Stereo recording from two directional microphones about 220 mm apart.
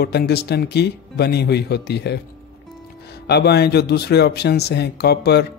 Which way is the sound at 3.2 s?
50° left (ahead or behind).